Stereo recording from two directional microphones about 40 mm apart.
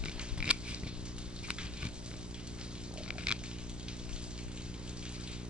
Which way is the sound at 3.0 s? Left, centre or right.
Right.